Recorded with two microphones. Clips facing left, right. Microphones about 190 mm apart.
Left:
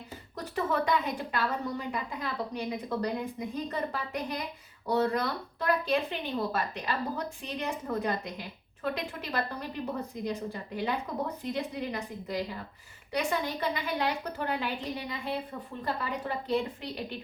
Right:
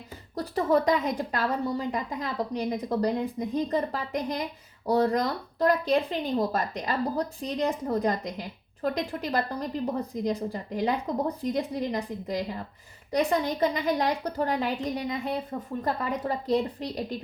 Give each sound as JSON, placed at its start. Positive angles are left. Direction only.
{"t": 0.3, "sound": "a woman's voice", "side_deg": -35}